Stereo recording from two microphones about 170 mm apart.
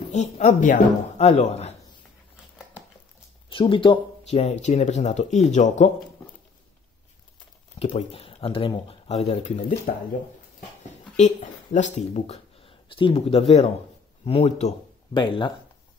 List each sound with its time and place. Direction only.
0.1 s speech: 45° left (ahead or behind)
3.4 s speech: 30° left (ahead or behind)
7.9 s speech: 35° left (ahead or behind)
11.1 s speech: 45° left (ahead or behind); by 15.5 s 30° left (ahead or behind)